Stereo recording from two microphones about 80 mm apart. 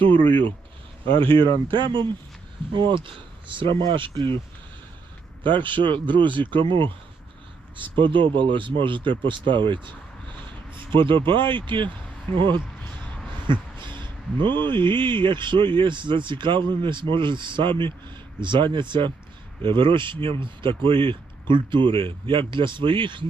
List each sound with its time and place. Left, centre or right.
1.0 s speech: right
5.4 s speech: right
10.4 s speech: right
13.5 s a sound: right
14.7 s speech: right